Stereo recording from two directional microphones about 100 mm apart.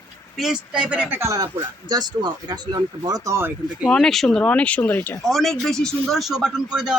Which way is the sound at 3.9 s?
5° left (ahead or behind).